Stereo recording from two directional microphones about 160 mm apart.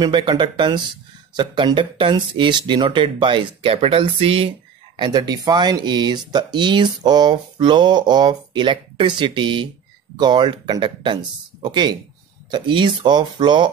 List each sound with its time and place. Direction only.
0.0 s speech: 30° right (ahead or behind)